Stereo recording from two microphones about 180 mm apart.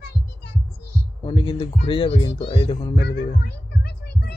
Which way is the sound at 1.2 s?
25° left (ahead or behind).